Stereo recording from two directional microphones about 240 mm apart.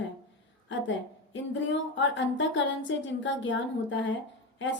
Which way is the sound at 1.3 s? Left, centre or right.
Left.